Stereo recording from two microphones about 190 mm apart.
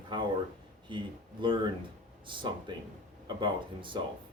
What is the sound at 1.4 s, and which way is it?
Speech, 25° right (ahead or behind).